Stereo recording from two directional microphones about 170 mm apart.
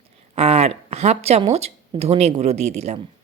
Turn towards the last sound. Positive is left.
turn(degrees=-40)  # may be behind; listen again after turning